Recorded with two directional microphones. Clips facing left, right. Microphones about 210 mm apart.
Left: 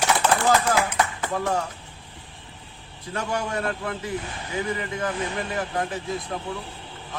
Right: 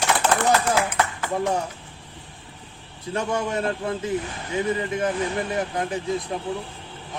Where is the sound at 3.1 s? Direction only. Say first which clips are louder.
Right 3 dB; 25° right (ahead or behind).